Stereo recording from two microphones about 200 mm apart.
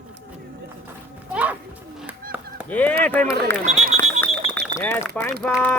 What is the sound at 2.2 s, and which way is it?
Chop, 45° right (ahead or behind).